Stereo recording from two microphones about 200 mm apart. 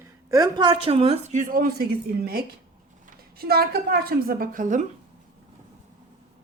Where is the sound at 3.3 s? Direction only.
50° right (ahead or behind).